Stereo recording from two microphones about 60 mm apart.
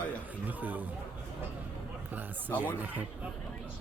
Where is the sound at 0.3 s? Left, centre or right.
Right.